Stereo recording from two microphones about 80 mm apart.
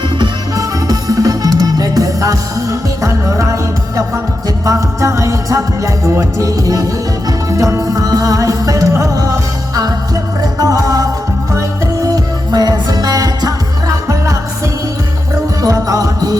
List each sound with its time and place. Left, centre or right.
0.5 s music: right
12.0 s music: right
15.6 s music: right